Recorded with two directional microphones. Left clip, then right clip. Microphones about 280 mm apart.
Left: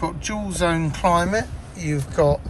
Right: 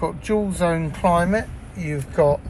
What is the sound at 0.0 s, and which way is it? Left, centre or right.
Speech, centre.